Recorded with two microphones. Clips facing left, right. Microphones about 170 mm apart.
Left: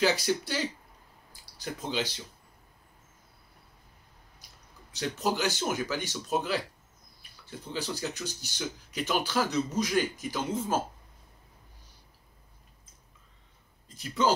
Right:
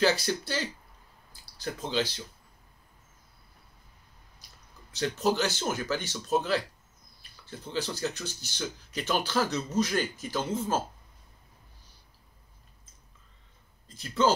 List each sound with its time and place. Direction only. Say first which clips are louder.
0.0 s speech: even; 15° left (ahead or behind)
1.6 s speech: right 2 dB; 15° left (ahead or behind)
4.9 s speech: right 3 dB; 15° left (ahead or behind)
13.9 s speech: right 2 dB; 15° left (ahead or behind)